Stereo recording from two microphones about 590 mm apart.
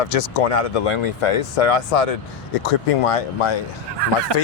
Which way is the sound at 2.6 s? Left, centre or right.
Left.